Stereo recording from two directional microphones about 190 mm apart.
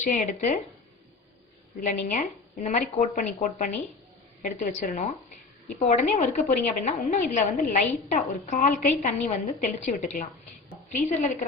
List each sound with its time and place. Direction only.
0.0 s a woman's voice: 40° left (ahead or behind)
1.8 s a woman's voice: 40° left (ahead or behind)